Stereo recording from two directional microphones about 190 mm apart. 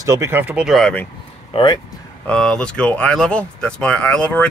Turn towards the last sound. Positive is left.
turn(degrees=5)  # may be behind; listen again after turning